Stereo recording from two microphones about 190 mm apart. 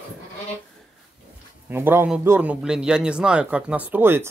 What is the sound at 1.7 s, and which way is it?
A man's voice, 10° right (ahead or behind).